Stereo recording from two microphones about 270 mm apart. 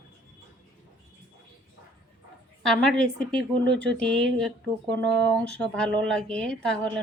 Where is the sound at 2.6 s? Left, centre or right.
Centre.